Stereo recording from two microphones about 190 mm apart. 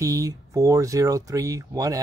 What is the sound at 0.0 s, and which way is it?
Speech, 15° right (ahead or behind).